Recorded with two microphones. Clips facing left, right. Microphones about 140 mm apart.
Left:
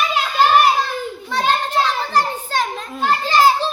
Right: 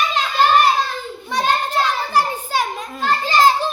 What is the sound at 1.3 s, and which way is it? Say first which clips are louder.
Children playing: even; 15° right (ahead or behind).